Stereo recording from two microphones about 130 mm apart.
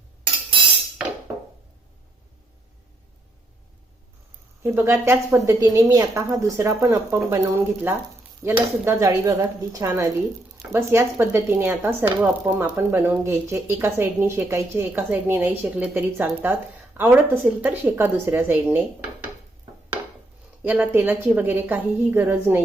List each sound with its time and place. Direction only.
4.6 s a woman's voice: 15° right (ahead or behind)
20.7 s a woman's voice: 15° right (ahead or behind)